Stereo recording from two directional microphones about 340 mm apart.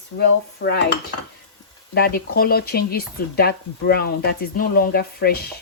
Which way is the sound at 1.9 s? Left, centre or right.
Left.